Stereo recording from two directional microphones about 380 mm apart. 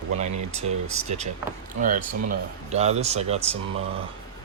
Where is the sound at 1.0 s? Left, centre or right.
Centre.